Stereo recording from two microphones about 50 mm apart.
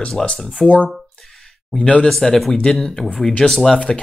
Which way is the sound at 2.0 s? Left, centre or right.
Centre.